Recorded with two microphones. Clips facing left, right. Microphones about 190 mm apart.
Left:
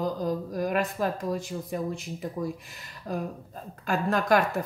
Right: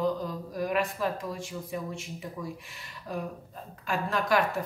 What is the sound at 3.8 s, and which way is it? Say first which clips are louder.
Speech: left 4 dB; 45° left (ahead or behind).